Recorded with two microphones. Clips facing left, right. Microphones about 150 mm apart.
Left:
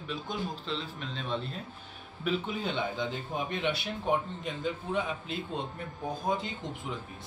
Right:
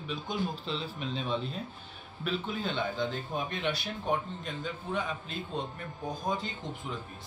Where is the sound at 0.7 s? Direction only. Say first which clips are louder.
Right 2 dB; 10° right (ahead or behind).